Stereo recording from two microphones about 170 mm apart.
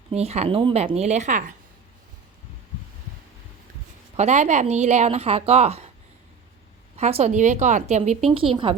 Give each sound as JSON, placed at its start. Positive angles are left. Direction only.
{"t": 0.1, "sound": "speech", "side_deg": -40}
{"t": 4.2, "sound": "speech", "side_deg": -45}
{"t": 6.9, "sound": "speech", "side_deg": -40}